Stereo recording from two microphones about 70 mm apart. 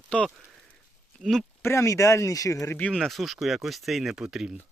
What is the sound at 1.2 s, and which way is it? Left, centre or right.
Speech, centre.